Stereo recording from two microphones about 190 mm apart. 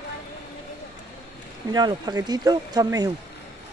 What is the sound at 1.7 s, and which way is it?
Speech, 20° right (ahead or behind).